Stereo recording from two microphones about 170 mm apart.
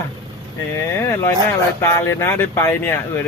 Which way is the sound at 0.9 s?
15° left (ahead or behind).